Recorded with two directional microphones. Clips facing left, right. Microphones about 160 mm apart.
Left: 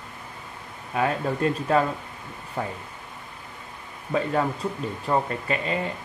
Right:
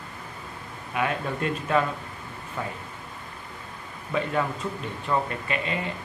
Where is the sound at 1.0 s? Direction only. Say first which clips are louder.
Left 3 dB; 35° left (ahead or behind).